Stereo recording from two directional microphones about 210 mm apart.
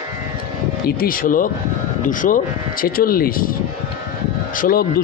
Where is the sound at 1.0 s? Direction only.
40° left (ahead or behind).